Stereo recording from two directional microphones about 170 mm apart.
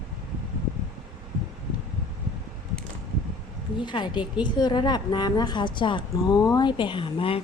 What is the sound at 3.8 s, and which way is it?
A woman's voice, 25° left (ahead or behind).